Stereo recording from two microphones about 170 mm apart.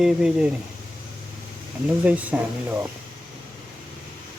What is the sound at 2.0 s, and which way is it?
Speech, 10° right (ahead or behind).